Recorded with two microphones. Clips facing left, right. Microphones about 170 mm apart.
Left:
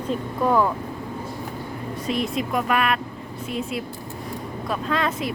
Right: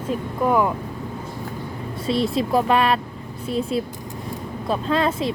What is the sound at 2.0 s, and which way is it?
Speech, 30° right (ahead or behind).